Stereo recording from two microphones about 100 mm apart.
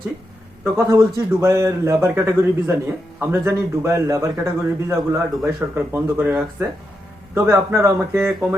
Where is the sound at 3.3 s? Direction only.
25° right (ahead or behind).